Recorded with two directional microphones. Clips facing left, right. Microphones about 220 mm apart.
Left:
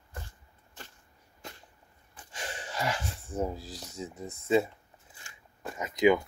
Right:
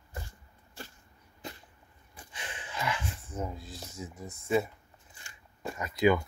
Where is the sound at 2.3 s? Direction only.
40° left (ahead or behind).